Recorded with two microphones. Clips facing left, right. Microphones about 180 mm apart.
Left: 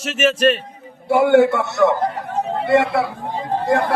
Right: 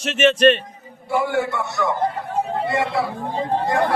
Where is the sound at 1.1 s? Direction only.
65° left (ahead or behind).